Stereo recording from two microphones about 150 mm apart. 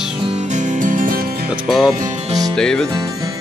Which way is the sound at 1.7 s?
Centre (ahead or behind).